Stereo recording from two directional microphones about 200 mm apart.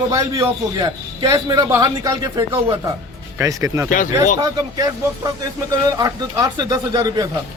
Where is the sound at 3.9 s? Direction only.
40° left (ahead or behind).